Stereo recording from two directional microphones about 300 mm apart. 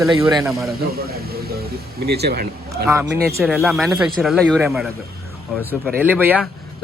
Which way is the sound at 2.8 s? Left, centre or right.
Centre.